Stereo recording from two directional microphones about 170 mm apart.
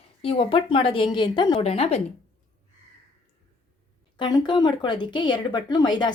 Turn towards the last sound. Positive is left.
turn(degrees=25)  # may be behind; listen again after turning